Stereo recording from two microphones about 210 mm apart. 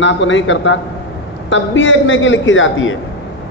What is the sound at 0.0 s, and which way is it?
A man's voice, 60° left (ahead or behind).